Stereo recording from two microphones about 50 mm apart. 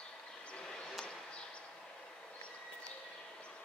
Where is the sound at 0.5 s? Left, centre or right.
Centre.